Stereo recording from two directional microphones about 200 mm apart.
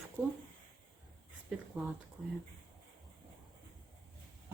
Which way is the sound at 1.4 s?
5° right (ahead or behind).